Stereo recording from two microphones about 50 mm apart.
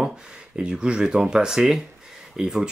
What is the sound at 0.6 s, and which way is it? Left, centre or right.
Speech, centre.